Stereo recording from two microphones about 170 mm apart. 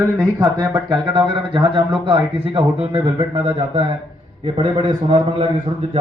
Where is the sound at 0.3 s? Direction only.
20° right (ahead or behind).